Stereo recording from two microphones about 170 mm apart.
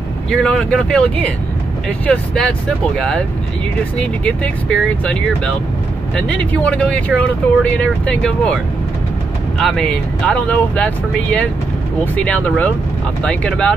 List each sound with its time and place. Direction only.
0.3 s speech: 5° left (ahead or behind)
9.6 s speech: 5° left (ahead or behind)